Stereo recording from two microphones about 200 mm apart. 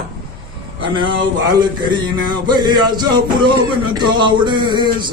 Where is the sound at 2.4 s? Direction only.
20° right (ahead or behind).